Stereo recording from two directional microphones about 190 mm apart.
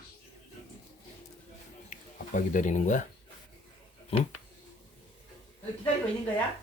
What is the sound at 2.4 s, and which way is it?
Speech, 45° left (ahead or behind).